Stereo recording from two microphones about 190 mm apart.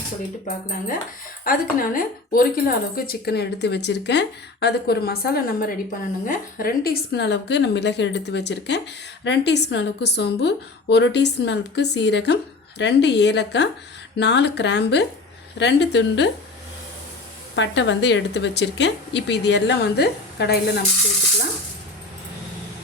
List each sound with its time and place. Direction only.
0.4 s speech: 40° left (ahead or behind); by 16.3 s 65° left (ahead or behind)
17.5 s speech: 70° left (ahead or behind)